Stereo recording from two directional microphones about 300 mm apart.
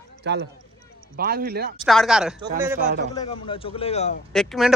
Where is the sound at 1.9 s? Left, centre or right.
Centre.